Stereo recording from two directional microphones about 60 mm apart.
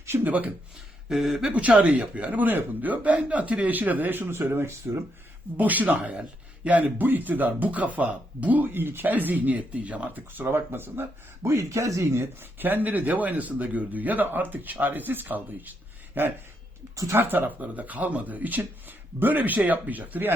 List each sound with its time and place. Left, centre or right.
0.3 s speech: right
1.1 s speech: centre
1.8 s speech: right
5.5 s speech: right
6.0 s speech: centre
10.3 s speech: right
11.4 s speech: right
12.5 s speech: right
16.9 s speech: right
17.2 s speech: right